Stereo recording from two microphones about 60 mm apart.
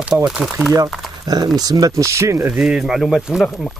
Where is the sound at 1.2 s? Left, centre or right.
Right.